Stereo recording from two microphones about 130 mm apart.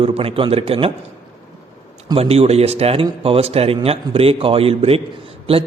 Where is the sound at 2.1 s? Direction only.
50° right (ahead or behind).